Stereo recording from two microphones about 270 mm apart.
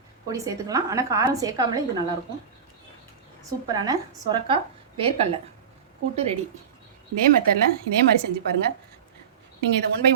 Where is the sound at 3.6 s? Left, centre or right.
Centre.